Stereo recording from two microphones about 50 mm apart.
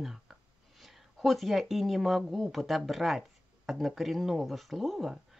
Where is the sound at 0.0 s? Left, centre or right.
Centre.